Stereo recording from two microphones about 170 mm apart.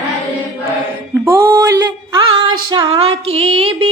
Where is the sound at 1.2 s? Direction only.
15° right (ahead or behind).